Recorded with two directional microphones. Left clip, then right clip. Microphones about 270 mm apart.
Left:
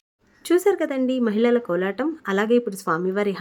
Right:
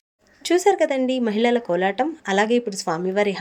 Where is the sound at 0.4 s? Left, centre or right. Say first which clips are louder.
Right 2 dB; centre.